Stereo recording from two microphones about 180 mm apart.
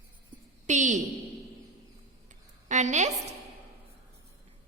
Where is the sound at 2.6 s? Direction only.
40° right (ahead or behind).